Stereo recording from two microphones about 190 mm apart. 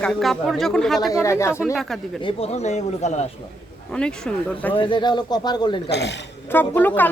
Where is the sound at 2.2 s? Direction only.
35° left (ahead or behind).